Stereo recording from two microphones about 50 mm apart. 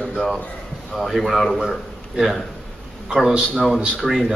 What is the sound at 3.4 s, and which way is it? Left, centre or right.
Speech, centre.